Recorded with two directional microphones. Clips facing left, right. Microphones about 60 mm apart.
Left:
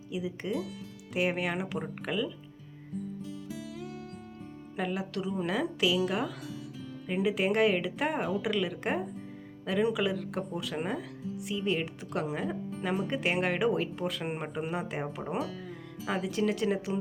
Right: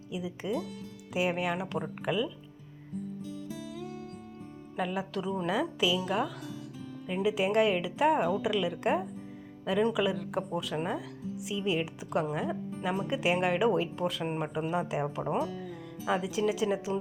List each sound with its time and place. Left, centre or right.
0.1 s a woman's voice: centre
4.8 s a woman's voice: centre
14.3 s speech: centre
14.7 s a woman's voice: centre